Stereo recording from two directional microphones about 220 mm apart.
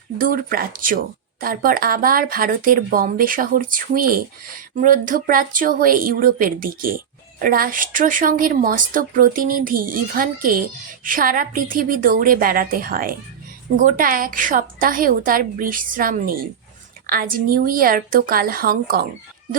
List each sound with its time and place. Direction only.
0.2 s speech: 40° right (ahead or behind)